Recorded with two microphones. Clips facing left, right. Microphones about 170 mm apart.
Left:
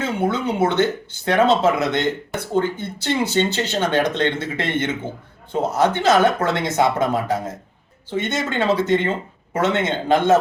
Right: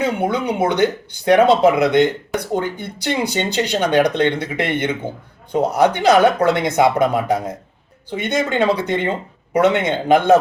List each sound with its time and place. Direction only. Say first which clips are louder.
0.0 s speech: right 2 dB; 15° right (ahead or behind)